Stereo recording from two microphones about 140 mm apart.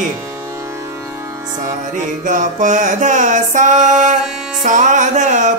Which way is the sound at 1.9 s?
65° right (ahead or behind).